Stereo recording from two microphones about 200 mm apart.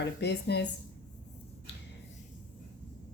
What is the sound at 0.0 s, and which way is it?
Speech, 60° left (ahead or behind).